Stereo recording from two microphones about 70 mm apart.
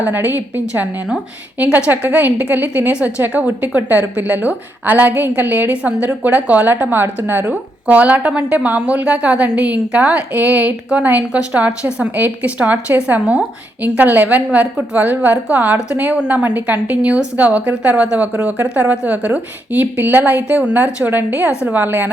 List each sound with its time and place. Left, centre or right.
0.0 s a woman's voice: right
7.9 s a woman's voice: right